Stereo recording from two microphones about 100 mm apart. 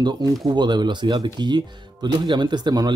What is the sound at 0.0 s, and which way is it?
Speech, 45° right (ahead or behind).